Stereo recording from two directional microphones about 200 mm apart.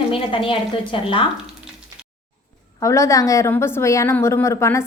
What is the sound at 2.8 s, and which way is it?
A woman's voice, 15° left (ahead or behind).